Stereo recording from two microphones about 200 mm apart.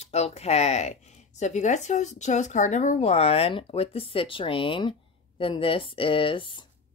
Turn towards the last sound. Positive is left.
turn(degrees=25)  # may be behind; listen again after turning